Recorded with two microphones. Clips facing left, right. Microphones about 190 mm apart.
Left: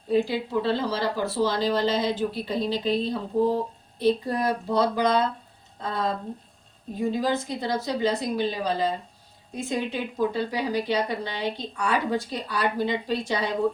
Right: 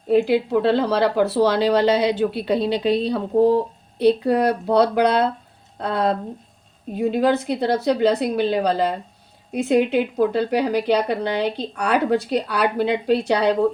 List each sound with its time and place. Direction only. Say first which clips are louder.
0.1 s a woman's voice: right 7 dB; 65° right (ahead or behind)